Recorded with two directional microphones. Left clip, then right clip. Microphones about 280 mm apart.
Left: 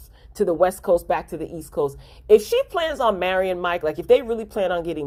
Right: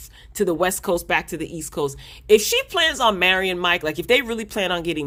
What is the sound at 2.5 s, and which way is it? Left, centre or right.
Speech, right.